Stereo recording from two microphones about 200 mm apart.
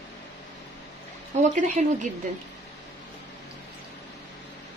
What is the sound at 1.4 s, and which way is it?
Speech, 35° right (ahead or behind).